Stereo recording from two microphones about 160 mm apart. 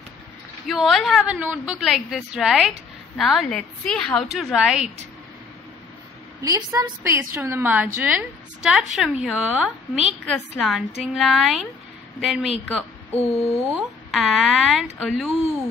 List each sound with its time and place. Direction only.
0.7 s a woman's voice: centre (ahead or behind)
6.4 s a woman's voice: 20° right (ahead or behind); by 15.7 s centre (ahead or behind)